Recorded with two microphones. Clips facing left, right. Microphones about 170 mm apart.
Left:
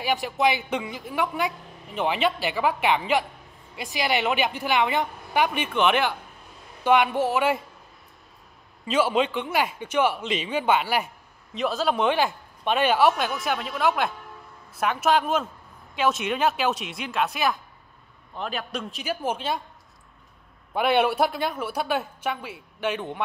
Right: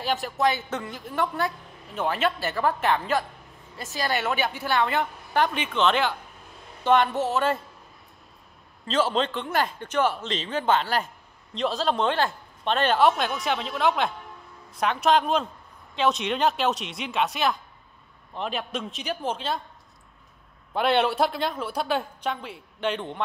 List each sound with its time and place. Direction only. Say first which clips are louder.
0.4 s a woman's voice: left 2 dB; 10° left (ahead or behind)
0.8 s a man's voice: left 2 dB; centre (ahead or behind)
1.1 s a woman's voice: even; 10° left (ahead or behind)
8.8 s a woman's voice: left 2 dB; 10° left (ahead or behind)
20.7 s a woman's voice: left 1 dB; 10° left (ahead or behind)